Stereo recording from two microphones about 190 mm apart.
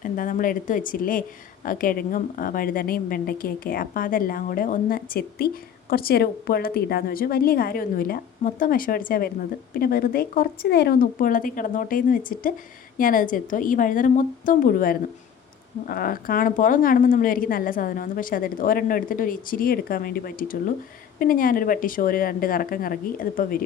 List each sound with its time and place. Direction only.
0.0 s speech: 45° left (ahead or behind)